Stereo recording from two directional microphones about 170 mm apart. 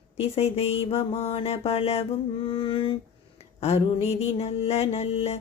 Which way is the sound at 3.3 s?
35° left (ahead or behind).